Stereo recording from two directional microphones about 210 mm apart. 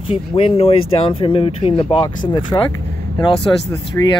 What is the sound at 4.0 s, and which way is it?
Speech, 10° left (ahead or behind).